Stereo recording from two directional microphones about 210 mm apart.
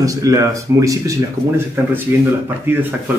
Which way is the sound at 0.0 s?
15° right (ahead or behind).